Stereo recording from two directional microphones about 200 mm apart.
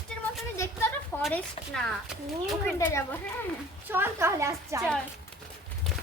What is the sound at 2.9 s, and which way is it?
Speech, 10° left (ahead or behind).